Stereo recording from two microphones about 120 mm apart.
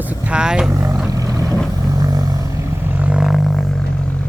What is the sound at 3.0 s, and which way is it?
Roar, 10° right (ahead or behind).